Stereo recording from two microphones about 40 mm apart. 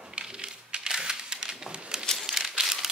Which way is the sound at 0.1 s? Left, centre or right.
Right.